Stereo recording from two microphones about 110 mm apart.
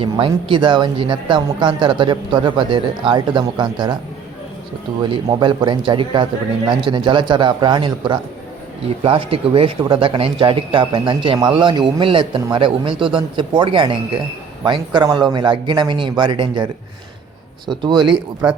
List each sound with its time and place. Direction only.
0.0 s speech: 50° right (ahead or behind)
5.0 s speech: 45° right (ahead or behind)
9.0 s speech: 55° right (ahead or behind)
14.6 s speech: 40° right (ahead or behind)
17.7 s speech: 45° right (ahead or behind)